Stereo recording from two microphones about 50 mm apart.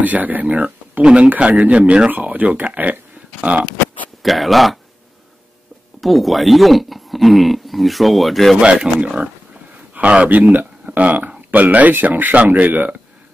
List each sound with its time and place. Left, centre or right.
0.0 s speech: right
4.2 s speech: centre
5.9 s speech: centre
8.5 s speech: right